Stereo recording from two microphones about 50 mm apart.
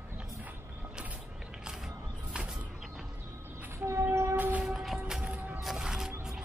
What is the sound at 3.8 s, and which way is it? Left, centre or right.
Train, right.